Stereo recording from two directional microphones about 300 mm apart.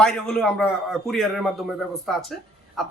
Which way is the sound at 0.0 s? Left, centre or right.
Centre.